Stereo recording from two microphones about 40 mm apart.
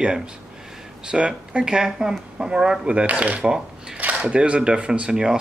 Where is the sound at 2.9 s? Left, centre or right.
Right.